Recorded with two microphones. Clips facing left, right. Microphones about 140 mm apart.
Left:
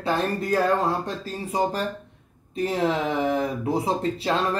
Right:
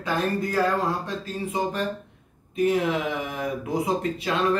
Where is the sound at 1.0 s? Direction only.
35° left (ahead or behind).